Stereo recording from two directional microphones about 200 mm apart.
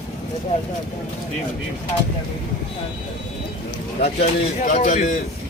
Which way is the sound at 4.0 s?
40° left (ahead or behind).